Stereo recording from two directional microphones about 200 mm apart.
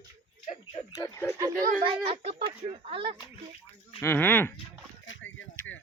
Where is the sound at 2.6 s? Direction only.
25° right (ahead or behind).